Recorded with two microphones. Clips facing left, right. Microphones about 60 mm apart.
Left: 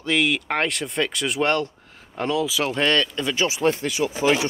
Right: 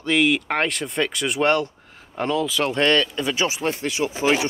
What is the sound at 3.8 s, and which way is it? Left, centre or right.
Speech, right.